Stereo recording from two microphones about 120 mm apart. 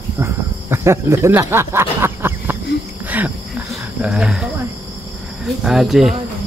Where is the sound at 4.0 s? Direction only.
5° right (ahead or behind).